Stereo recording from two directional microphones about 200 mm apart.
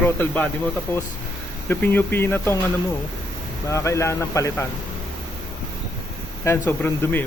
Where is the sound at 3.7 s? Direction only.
15° left (ahead or behind).